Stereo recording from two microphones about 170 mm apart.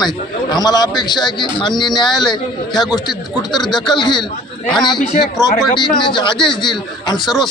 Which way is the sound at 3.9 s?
25° left (ahead or behind).